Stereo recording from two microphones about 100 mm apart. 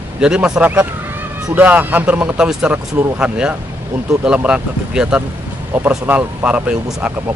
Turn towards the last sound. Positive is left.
turn(degrees=-10)  # may be behind; listen again after turning